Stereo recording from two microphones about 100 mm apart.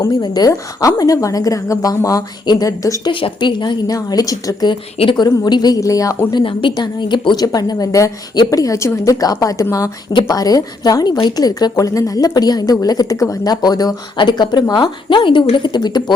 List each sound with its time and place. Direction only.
0.0 s a woman's voice: 40° left (ahead or behind)
3.1 s a woman's voice: 55° left (ahead or behind); by 6.1 s 35° left (ahead or behind)
6.3 s speech: 60° left (ahead or behind)
6.7 s a woman's voice: 45° left (ahead or behind)